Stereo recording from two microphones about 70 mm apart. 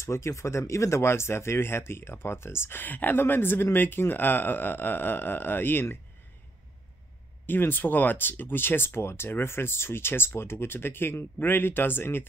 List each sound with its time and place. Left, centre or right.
0.0 s speech: left
7.4 s speech: left